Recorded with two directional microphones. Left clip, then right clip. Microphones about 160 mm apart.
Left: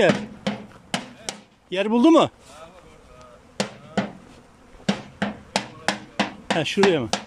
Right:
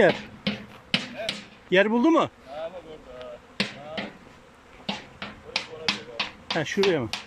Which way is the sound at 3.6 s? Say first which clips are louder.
Left 3 dB; 45° left (ahead or behind).